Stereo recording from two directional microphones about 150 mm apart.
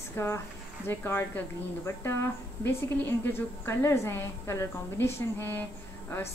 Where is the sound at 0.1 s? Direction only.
15° left (ahead or behind).